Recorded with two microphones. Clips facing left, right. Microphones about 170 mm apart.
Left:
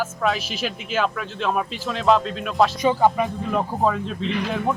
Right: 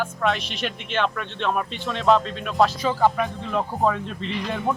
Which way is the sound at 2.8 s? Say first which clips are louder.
Left 2 dB; 15° left (ahead or behind).